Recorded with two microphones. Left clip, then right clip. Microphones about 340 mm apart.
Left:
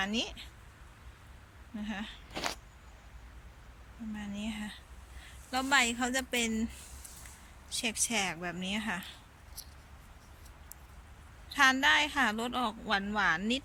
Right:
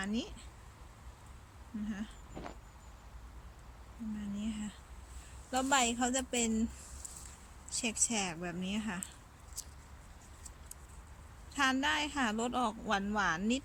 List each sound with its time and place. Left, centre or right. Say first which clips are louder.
0.0 s a woman's voice: left 6 dB; centre
1.9 s a woman's voice: left 6 dB; centre
2.3 s a sound: left 13 dB; left
4.2 s a woman's voice: left 3 dB; centre
7.7 s a woman's voice: left 3 dB; centre
11.5 s a woman's voice: left 7 dB; centre